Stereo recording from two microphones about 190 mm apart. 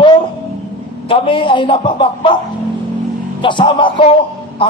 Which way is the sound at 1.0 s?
25° left (ahead or behind).